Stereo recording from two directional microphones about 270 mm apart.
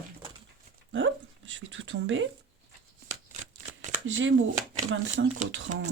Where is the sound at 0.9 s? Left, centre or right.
Right.